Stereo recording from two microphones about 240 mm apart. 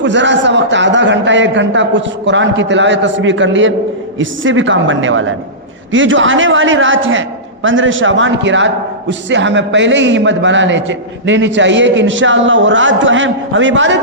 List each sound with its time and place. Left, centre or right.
0.0 s a man's voice: right